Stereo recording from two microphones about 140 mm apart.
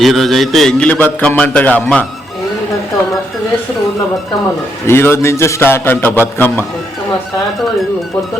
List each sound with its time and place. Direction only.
0.0 s a man's voice: centre (ahead or behind)
4.9 s a man's voice: 15° left (ahead or behind)